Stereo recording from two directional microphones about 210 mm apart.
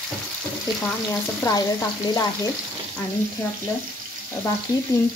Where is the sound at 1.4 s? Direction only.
15° left (ahead or behind).